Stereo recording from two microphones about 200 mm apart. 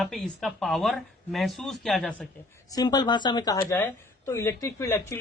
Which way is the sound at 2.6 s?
20° left (ahead or behind).